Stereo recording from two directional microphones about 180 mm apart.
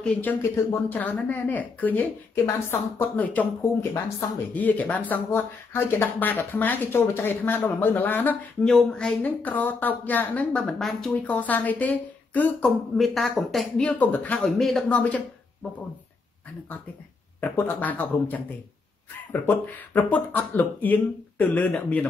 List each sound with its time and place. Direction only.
0.0 s speech: 10° left (ahead or behind)
4.6 s speech: 10° left (ahead or behind)
17.4 s speech: 10° left (ahead or behind)